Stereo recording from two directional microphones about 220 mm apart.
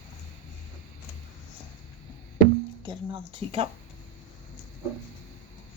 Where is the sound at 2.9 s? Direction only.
25° right (ahead or behind).